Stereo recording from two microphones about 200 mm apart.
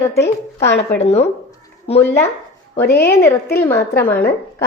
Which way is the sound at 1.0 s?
30° left (ahead or behind).